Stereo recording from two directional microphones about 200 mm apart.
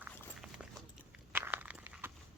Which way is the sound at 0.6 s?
5° right (ahead or behind).